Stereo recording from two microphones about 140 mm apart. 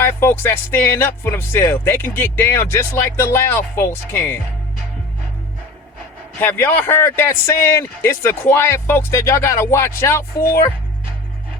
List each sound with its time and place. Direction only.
0.0 s speech: 15° left (ahead or behind)
6.4 s speech: 15° left (ahead or behind)